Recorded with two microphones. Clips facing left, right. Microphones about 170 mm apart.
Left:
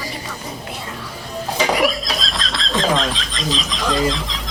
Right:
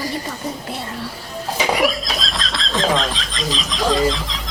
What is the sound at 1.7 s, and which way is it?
Speech, centre (ahead or behind).